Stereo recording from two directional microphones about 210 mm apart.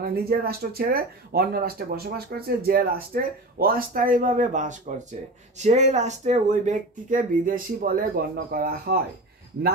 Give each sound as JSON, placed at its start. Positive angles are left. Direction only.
{"t": 0.0, "sound": "speech", "side_deg": -45}